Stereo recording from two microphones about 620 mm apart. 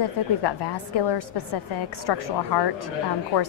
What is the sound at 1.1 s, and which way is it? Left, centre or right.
A woman's voice, left.